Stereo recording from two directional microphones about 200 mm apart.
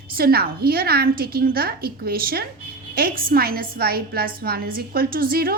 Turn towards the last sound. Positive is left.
turn(degrees=-50)  # may be behind; listen again after turning